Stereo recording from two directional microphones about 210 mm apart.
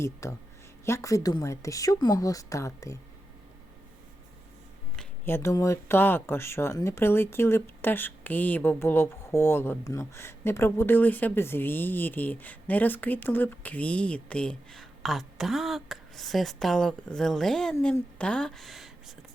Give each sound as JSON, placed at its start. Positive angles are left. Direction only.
{"t": 0.0, "sound": "speech", "side_deg": 15}
{"t": 4.9, "sound": "a woman's voice", "side_deg": 10}